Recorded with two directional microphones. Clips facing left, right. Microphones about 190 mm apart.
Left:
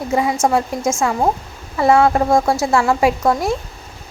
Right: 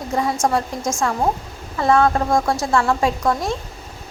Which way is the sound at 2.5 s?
5° left (ahead or behind).